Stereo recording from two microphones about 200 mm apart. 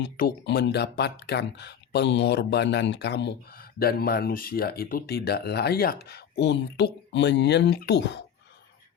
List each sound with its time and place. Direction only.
0.0 s speech: 55° left (ahead or behind)